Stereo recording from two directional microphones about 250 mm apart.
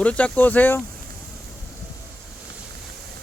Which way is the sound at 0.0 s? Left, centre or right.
Centre.